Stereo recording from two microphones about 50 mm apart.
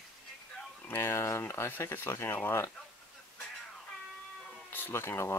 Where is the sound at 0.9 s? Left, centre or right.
Left.